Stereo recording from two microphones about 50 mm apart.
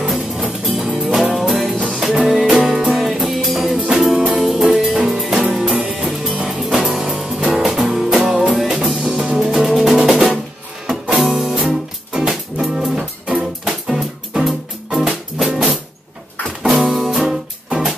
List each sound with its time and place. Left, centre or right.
0.0 s music: centre
3.7 s music: centre